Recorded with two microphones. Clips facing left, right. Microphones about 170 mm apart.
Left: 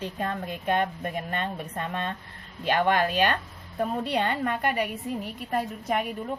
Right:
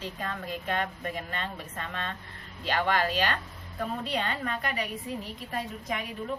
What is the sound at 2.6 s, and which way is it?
A woman's voice, 55° left (ahead or behind).